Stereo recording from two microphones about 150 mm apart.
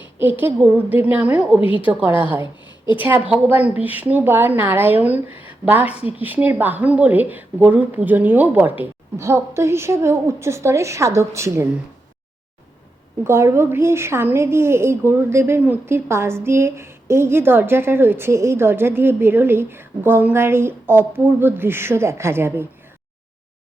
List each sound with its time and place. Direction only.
0.2 s a woman's voice: 15° right (ahead or behind)
5.5 s a sound: 10° right (ahead or behind)
6.1 s a woman's voice: 10° right (ahead or behind)
13.2 s a woman's voice: 15° right (ahead or behind)